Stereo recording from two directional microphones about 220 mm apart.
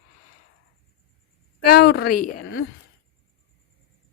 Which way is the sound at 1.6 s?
45° left (ahead or behind).